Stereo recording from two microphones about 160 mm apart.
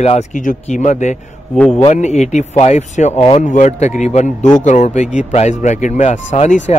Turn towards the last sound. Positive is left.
turn(degrees=50)  # may be behind; listen again after turning